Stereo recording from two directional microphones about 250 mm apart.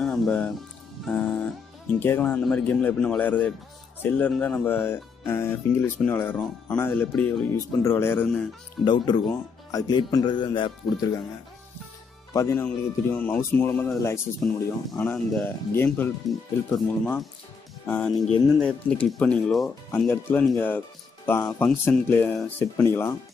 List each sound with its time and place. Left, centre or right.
0.0 s music: centre
1.0 s speech: centre
8.8 s speech: centre
12.4 s speech: centre